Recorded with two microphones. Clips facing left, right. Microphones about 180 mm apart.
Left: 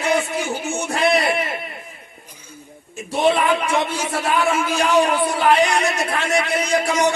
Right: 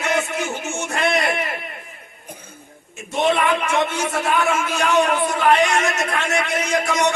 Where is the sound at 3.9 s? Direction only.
35° left (ahead or behind).